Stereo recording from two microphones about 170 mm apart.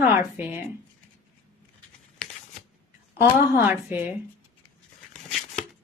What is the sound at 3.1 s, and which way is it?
Speech, 15° right (ahead or behind).